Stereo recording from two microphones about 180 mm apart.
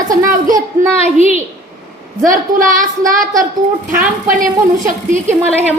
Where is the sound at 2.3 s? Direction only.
45° right (ahead or behind).